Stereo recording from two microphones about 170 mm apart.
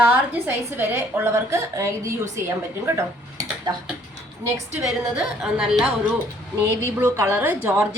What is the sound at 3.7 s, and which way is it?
Speech, 20° right (ahead or behind).